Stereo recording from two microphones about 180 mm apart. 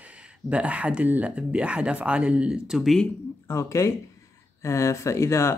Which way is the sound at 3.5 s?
15° left (ahead or behind).